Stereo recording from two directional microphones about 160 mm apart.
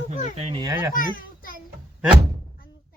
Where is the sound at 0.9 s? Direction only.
60° left (ahead or behind).